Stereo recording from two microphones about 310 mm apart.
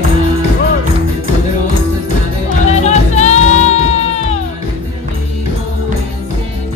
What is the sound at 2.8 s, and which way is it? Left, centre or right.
Music, left.